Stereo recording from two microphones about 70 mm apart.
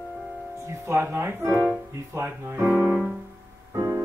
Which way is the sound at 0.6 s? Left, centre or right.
Right.